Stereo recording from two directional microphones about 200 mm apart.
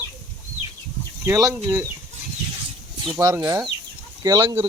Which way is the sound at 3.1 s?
15° right (ahead or behind).